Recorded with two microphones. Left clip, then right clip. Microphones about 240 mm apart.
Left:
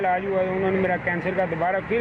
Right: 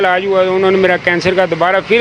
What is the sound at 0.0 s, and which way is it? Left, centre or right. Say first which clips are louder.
Speech: right 11 dB; right.